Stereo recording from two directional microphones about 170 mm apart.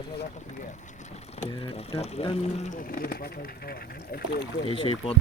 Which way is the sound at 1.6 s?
35° left (ahead or behind).